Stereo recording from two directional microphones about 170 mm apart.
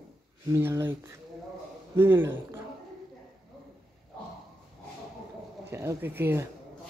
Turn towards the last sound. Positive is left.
turn(degrees=-10)  # may be behind; listen again after turning